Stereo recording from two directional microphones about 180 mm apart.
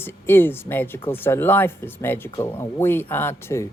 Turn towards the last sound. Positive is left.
turn(degrees=15)  # may be behind; listen again after turning